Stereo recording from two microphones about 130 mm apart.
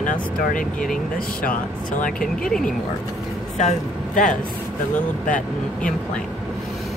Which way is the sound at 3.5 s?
70° left (ahead or behind).